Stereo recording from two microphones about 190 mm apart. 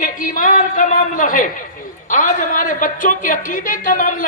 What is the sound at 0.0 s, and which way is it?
A woman's voice, 45° left (ahead or behind).